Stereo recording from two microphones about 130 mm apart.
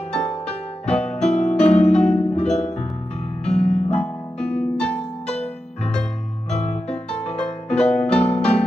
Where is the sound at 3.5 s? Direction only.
55° left (ahead or behind).